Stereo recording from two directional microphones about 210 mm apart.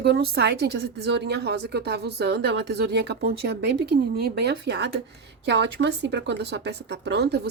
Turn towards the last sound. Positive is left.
turn(degrees=-50)  # may be behind; listen again after turning